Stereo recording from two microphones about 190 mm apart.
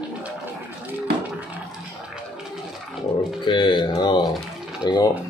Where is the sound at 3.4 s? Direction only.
25° left (ahead or behind).